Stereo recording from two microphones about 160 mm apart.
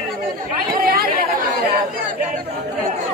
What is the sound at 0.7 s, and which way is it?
Chatter, 65° right (ahead or behind).